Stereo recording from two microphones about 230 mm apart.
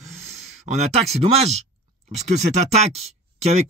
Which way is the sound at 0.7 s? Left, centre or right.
Right.